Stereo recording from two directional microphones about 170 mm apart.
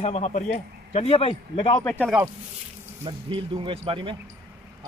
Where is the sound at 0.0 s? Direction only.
40° left (ahead or behind).